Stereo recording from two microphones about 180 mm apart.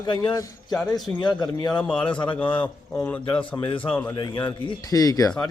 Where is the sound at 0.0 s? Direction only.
25° left (ahead or behind).